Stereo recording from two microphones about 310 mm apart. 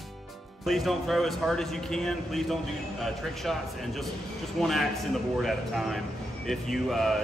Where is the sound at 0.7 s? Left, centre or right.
Centre.